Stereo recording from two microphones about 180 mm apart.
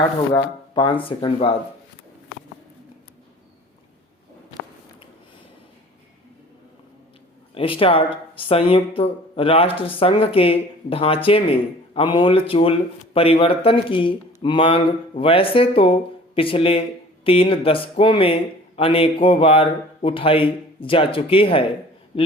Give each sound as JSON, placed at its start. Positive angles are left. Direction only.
{"t": 0.3, "sound": "speech", "side_deg": 25}
{"t": 7.5, "sound": "a man's voice", "side_deg": 30}